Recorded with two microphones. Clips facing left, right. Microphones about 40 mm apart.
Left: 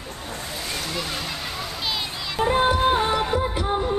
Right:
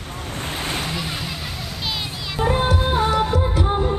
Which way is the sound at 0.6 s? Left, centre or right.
Right.